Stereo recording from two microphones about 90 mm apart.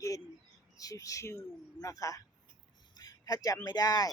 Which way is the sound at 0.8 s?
40° left (ahead or behind).